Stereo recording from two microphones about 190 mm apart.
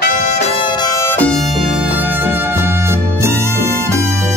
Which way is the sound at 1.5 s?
10° right (ahead or behind).